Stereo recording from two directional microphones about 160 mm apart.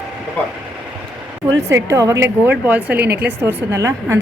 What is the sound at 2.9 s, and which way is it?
Speech, 90° right.